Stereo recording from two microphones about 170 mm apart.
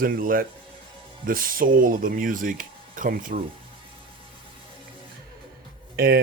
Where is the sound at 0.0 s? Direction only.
55° right (ahead or behind).